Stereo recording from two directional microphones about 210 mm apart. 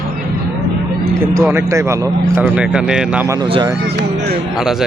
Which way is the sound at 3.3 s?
20° right (ahead or behind).